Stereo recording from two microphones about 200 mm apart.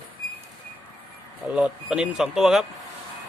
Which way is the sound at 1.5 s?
5° right (ahead or behind).